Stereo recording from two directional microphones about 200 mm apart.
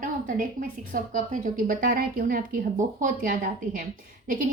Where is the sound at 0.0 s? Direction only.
40° right (ahead or behind).